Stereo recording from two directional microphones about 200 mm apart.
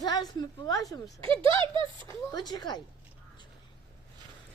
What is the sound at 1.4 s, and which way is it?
Speech, 25° right (ahead or behind).